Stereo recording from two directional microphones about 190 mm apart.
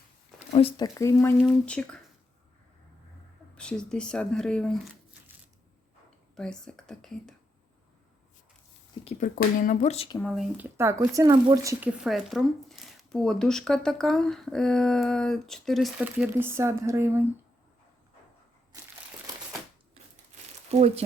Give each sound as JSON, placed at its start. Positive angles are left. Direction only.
{"t": 0.5, "sound": "speech", "side_deg": 30}
{"t": 0.9, "sound": "speech", "side_deg": 15}
{"t": 3.5, "sound": "speech", "side_deg": 5}
{"t": 6.3, "sound": "speech", "side_deg": 5}
{"t": 9.0, "sound": "speech", "side_deg": 45}
{"t": 10.2, "sound": "speech", "side_deg": 0}
{"t": 10.8, "sound": "speech", "side_deg": -15}
{"t": 20.0, "sound": "crumpling", "side_deg": -30}
{"t": 20.7, "sound": "speech", "side_deg": -35}